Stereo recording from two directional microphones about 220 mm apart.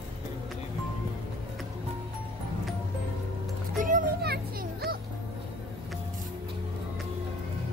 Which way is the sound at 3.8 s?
40° right (ahead or behind).